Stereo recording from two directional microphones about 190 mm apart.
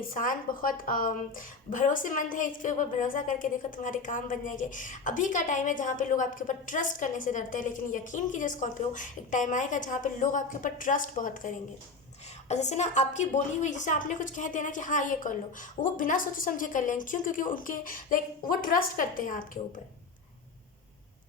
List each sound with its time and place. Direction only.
0.1 s a woman's voice: 45° left (ahead or behind)